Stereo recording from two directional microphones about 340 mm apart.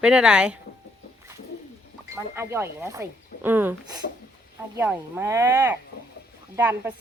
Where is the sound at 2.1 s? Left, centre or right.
Centre.